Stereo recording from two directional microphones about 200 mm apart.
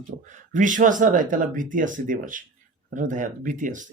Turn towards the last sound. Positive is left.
turn(degrees=-40)  # may be behind; listen again after turning